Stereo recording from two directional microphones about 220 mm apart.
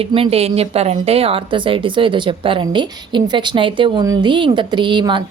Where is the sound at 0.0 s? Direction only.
25° right (ahead or behind).